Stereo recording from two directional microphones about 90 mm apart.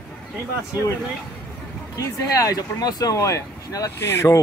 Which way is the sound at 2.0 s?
40° left (ahead or behind).